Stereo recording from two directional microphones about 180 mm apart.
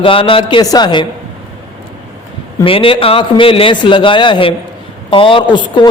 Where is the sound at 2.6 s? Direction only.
30° left (ahead or behind).